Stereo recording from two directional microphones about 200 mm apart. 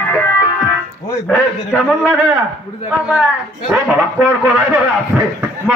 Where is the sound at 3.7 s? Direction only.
5° right (ahead or behind).